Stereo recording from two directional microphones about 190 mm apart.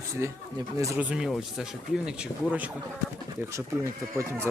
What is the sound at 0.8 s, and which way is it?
Speech, 15° right (ahead or behind).